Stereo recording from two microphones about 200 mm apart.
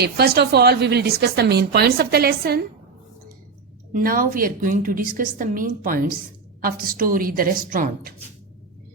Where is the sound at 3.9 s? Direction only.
45° right (ahead or behind).